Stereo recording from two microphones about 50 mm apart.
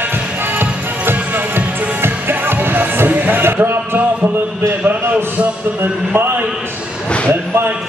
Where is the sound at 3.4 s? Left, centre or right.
Right.